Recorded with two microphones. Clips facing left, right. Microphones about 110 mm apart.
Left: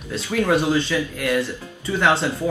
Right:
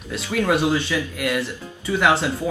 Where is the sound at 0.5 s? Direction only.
10° right (ahead or behind).